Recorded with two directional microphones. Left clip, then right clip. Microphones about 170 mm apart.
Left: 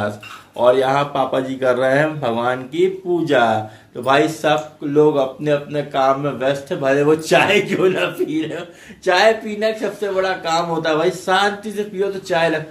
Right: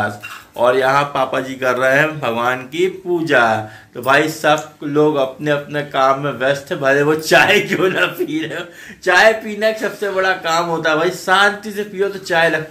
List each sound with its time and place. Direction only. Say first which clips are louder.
0.6 s speech: right 1 dB; 10° left (ahead or behind); by 2.9 s 25° left (ahead or behind)
3.3 s speech: right 2 dB; 10° left (ahead or behind)